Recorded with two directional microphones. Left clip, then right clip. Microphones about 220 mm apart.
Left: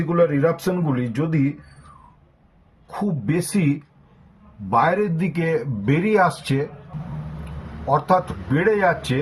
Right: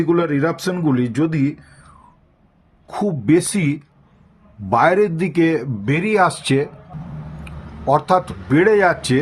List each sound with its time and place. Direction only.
0.1 s speech: 45° right (ahead or behind)
2.8 s speech: 45° right (ahead or behind)
7.9 s speech: 40° right (ahead or behind)